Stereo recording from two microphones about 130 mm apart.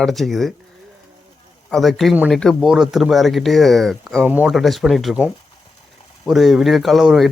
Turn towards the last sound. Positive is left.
turn(degrees=0)  # may be behind; listen again after turning